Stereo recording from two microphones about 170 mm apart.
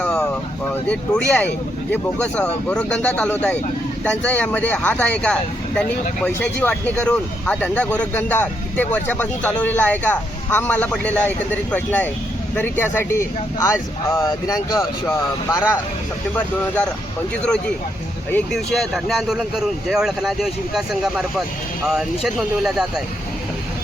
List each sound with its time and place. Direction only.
0.7 s speech: 10° left (ahead or behind)
18.3 s speech: 5° left (ahead or behind)